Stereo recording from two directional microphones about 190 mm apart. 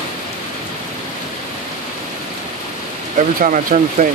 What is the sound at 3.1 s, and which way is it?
Speech, 40° right (ahead or behind).